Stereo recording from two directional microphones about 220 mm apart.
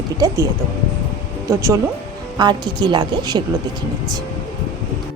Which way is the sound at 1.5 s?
15° right (ahead or behind).